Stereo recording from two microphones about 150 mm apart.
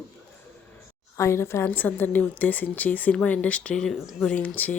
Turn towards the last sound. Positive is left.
turn(degrees=10)  # may be behind; listen again after turning